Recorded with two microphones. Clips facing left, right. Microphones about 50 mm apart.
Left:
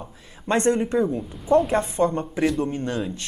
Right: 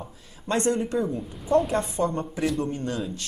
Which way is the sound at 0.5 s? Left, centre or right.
Left.